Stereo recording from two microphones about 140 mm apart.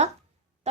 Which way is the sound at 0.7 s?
50° right (ahead or behind).